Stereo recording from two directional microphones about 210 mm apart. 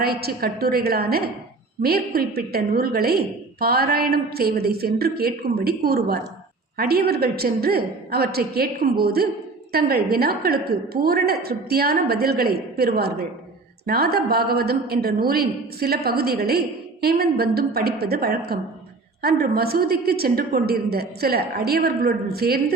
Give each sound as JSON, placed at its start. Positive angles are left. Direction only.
{"t": 0.0, "sound": "a woman's voice", "side_deg": -45}